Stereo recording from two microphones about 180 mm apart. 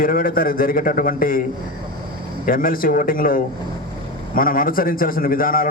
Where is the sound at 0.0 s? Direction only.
55° left (ahead or behind).